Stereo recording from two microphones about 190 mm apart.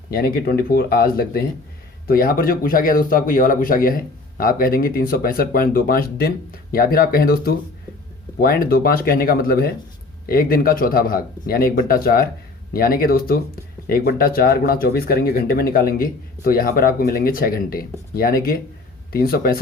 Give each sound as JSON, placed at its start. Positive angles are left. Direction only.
{"t": 0.1, "sound": "speech", "side_deg": 50}